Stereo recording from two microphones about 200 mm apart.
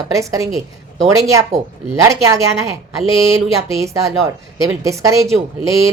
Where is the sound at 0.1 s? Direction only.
15° right (ahead or behind).